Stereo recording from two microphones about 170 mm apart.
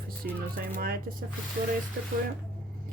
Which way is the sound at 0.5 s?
60° right (ahead or behind).